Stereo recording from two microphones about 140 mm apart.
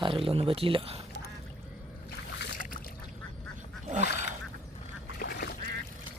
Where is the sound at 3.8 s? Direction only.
60° right (ahead or behind).